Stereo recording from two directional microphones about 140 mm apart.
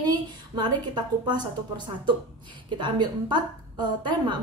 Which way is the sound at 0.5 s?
30° right (ahead or behind).